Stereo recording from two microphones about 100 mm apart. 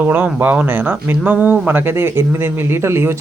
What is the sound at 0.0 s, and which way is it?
Speech, 20° right (ahead or behind).